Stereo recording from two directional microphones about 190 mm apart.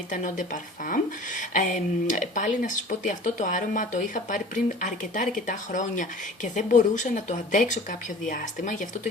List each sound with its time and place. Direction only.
0.1 s speech: 40° left (ahead or behind)